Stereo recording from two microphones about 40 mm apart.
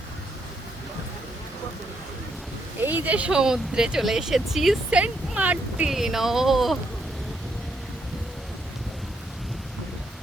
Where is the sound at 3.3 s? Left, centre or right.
Centre.